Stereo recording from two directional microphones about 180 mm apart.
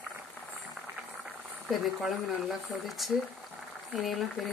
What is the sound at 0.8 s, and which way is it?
Speech, 10° right (ahead or behind).